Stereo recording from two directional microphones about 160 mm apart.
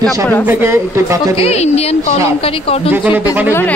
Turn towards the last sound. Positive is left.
turn(degrees=15)  # may be behind; listen again after turning